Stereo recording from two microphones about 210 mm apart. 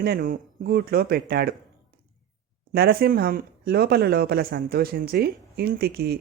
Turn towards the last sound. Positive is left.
turn(degrees=-50)  # may be behind; listen again after turning